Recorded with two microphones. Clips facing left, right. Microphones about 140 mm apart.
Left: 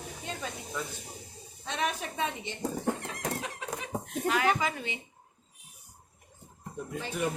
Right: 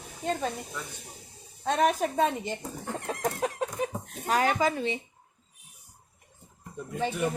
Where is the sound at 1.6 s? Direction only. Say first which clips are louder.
Right 8 dB; 45° right (ahead or behind).